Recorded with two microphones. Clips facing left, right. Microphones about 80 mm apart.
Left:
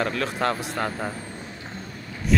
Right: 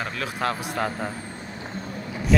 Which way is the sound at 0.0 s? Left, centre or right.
Centre.